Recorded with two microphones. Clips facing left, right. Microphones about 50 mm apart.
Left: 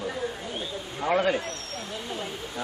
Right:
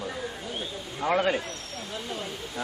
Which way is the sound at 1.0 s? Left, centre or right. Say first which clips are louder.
Left 1 dB; centre.